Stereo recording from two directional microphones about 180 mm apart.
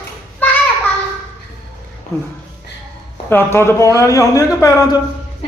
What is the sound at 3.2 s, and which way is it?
A man's voice, 15° left (ahead or behind).